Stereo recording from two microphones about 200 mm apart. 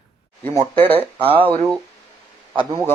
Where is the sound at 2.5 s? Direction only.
25° right (ahead or behind).